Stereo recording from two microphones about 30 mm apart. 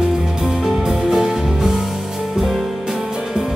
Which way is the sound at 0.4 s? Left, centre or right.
Centre.